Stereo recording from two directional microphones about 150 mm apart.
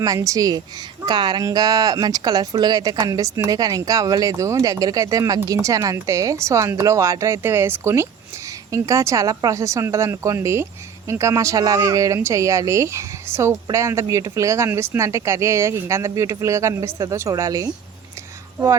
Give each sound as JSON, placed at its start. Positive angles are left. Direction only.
{"t": 0.0, "sound": "speech", "side_deg": -20}